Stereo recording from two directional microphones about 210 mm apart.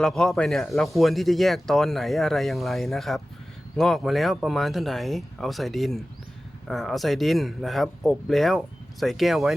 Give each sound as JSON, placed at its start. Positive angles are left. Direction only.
{"t": 0.0, "sound": "speech", "side_deg": 0}